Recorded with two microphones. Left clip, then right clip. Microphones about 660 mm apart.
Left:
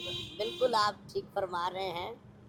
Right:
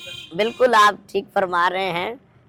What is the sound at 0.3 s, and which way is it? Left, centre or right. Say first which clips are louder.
Speech: right 14 dB; right.